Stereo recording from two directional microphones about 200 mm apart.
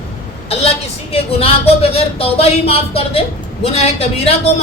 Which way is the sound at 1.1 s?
30° left (ahead or behind).